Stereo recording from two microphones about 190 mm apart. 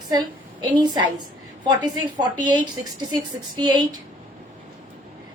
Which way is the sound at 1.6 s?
25° right (ahead or behind).